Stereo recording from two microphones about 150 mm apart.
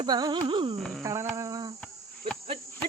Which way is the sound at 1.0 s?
20° right (ahead or behind).